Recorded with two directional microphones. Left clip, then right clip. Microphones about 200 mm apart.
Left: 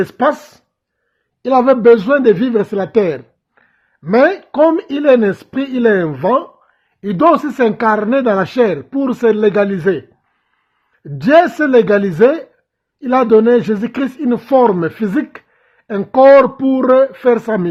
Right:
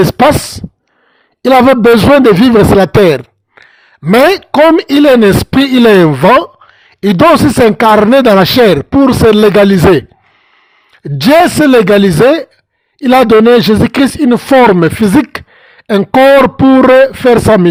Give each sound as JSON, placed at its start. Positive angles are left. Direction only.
{"t": 0.1, "sound": "speech", "side_deg": -35}
{"t": 1.5, "sound": "speech", "side_deg": -35}
{"t": 7.6, "sound": "speech", "side_deg": -30}
{"t": 11.0, "sound": "speech", "side_deg": -35}